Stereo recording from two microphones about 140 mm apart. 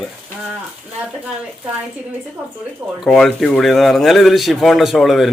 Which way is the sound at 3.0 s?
Centre (ahead or behind).